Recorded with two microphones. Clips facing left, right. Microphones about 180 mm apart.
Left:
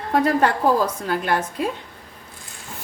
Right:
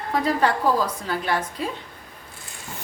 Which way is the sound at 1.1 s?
55° left (ahead or behind).